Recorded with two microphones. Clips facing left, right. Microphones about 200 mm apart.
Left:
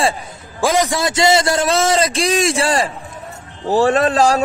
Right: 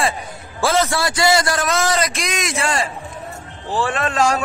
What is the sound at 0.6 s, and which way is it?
A man's voice, 15° left (ahead or behind).